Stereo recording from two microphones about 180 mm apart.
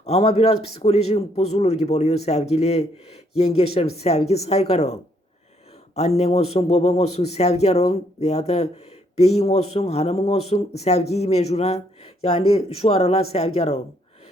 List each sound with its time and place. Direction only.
0.0 s a man's voice: 35° left (ahead or behind)